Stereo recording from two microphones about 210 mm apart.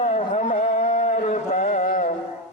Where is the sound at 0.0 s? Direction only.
30° left (ahead or behind).